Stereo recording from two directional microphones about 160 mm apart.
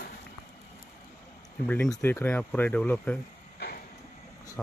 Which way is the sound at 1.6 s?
10° left (ahead or behind).